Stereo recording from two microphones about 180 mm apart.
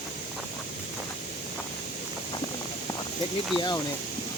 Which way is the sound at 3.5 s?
20° left (ahead or behind).